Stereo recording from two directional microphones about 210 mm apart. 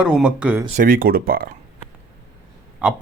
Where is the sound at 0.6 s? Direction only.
40° right (ahead or behind).